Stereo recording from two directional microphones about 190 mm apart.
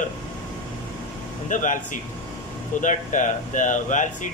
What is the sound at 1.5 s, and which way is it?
Speech, 40° left (ahead or behind).